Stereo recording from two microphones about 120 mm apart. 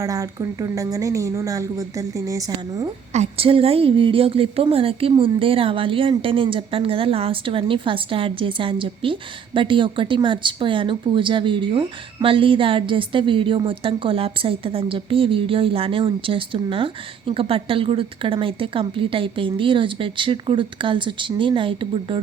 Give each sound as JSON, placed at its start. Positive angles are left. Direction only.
{"t": 0.0, "sound": "a woman's voice", "side_deg": -30}
{"t": 3.1, "sound": "speech", "side_deg": -60}